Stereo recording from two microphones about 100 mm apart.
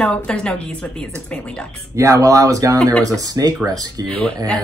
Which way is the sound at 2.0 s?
35° right (ahead or behind).